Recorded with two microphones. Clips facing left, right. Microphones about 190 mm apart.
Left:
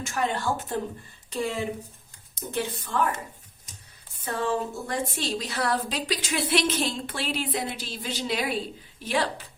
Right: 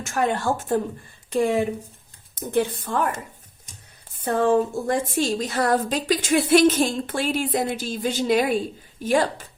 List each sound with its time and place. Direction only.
0.0 s a woman's voice: 50° right (ahead or behind)
4.2 s a woman's voice: 50° right (ahead or behind)